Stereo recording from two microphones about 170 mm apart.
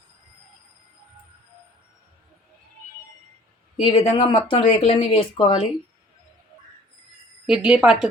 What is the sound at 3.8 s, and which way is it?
Speech, 30° left (ahead or behind).